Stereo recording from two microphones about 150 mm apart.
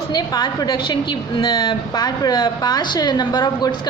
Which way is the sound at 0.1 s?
25° left (ahead or behind).